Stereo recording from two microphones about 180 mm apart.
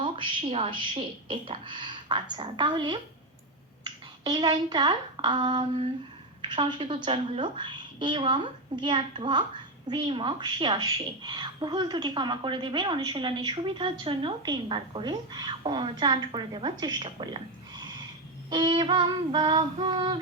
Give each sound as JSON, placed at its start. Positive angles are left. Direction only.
{"t": 0.0, "sound": "a woman's voice", "side_deg": -30}